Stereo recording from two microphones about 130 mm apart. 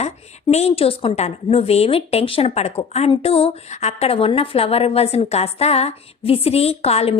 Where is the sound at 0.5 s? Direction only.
50° left (ahead or behind).